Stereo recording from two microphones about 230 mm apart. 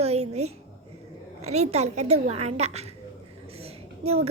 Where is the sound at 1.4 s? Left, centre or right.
Right.